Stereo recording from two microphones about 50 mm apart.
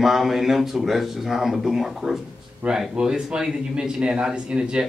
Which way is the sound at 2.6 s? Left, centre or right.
Right.